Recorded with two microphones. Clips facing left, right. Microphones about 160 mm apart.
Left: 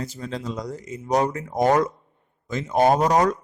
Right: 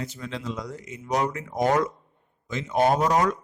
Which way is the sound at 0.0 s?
35° left (ahead or behind).